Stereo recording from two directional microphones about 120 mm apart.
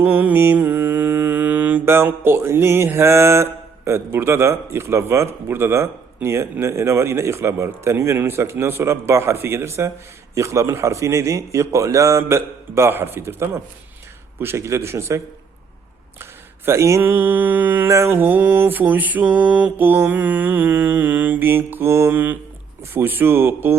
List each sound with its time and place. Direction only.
0.0 s mantra: 15° right (ahead or behind)
6.2 s speech: 20° right (ahead or behind)
16.6 s mantra: 25° right (ahead or behind)